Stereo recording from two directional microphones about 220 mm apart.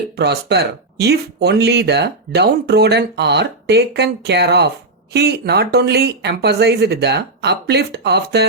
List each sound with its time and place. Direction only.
0.2 s speech: 50° right (ahead or behind)